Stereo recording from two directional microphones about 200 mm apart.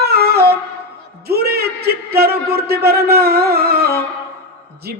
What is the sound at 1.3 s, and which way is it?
A man's voice, 50° right (ahead or behind).